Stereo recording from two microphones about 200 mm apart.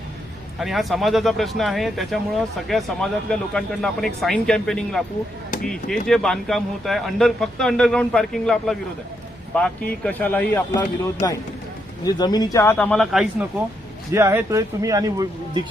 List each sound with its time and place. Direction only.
0.6 s a man's voice: centre (ahead or behind)
6.1 s a man's voice: centre (ahead or behind)
10.8 s speech: 20° left (ahead or behind); by 13.2 s centre (ahead or behind)
14.1 s speech: 15° right (ahead or behind)